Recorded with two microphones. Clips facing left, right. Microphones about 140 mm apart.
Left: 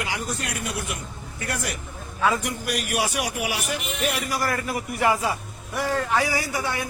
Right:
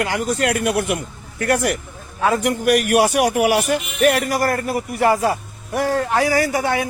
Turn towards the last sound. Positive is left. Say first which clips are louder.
# right 9 dB
turn(degrees=-70)  # may be behind; listen again after turning